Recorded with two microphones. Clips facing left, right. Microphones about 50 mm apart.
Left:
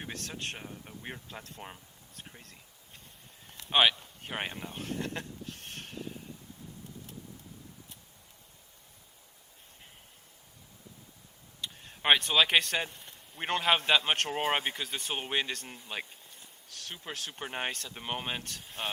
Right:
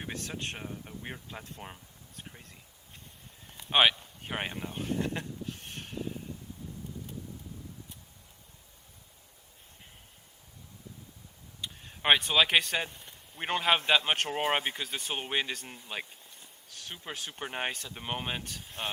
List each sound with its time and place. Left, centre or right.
0.1 s speech: centre
0.5 s speech: centre
3.4 s a sound: centre
4.0 s speech: centre
5.1 s a sound: centre
11.7 s speech: centre